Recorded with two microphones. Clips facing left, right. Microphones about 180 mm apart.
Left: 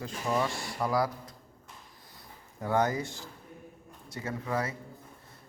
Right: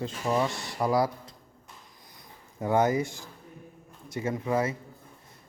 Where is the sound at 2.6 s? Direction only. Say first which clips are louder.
Right 4 dB; 20° right (ahead or behind).